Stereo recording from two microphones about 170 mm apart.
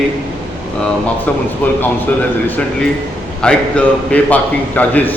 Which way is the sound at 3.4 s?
5° left (ahead or behind).